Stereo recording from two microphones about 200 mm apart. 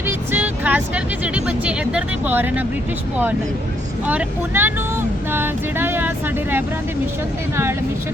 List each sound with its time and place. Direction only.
0.3 s speech: 10° right (ahead or behind)
4.0 s music: 10° right (ahead or behind)
7.5 s music: 10° right (ahead or behind)